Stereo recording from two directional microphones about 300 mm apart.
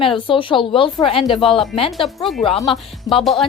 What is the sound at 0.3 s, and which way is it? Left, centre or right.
Speech, centre.